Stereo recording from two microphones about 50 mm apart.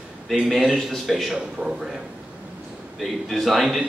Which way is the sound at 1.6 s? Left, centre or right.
Right.